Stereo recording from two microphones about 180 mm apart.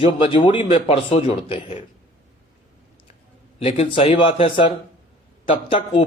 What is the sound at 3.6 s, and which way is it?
A man's voice, 30° left (ahead or behind).